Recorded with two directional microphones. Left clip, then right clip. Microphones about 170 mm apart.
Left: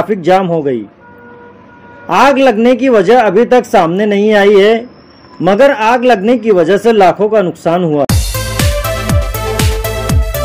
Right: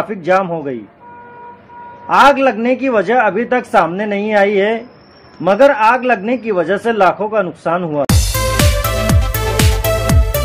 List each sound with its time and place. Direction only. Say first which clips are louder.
0.1 s a man's voice: left 4 dB; 35° left (ahead or behind)
2.0 s a man's voice: left 2 dB; 35° left (ahead or behind)
8.1 s music: right 1 dB; centre (ahead or behind)